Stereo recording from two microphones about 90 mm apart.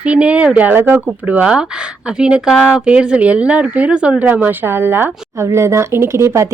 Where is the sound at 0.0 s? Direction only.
15° right (ahead or behind).